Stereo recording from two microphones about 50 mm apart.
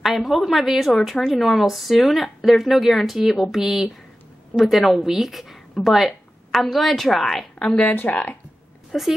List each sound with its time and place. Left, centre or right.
0.0 s a woman's voice: centre
7.6 s a woman's voice: centre
8.1 s speech: left
8.9 s a woman's voice: centre